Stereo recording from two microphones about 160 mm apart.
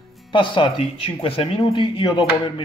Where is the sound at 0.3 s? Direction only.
30° left (ahead or behind).